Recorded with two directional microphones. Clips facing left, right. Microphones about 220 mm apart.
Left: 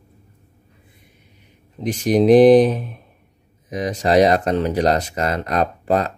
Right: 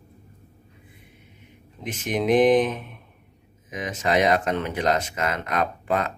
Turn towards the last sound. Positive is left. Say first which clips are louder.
# left 5 dB
turn(degrees=35)  # may be behind; listen again after turning